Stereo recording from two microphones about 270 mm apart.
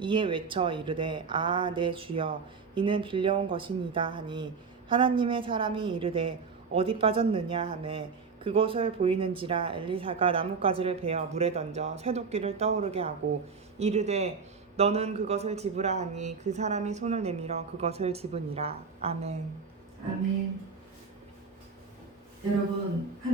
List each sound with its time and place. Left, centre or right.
0.0 s speech: centre